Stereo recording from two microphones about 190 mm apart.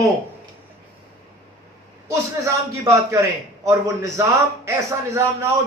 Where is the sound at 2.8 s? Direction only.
15° right (ahead or behind).